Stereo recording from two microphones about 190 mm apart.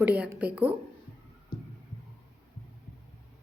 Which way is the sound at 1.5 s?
50° left (ahead or behind).